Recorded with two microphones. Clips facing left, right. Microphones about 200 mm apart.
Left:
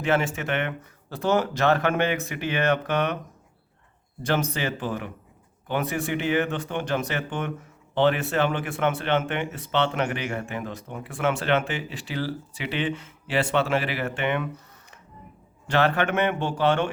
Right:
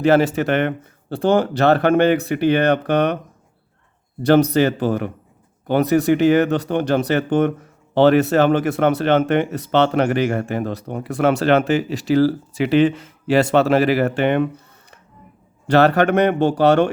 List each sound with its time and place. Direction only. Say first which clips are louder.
0.0 s speech: right 9 dB; 35° right (ahead or behind)
4.2 s speech: right 12 dB; 35° right (ahead or behind)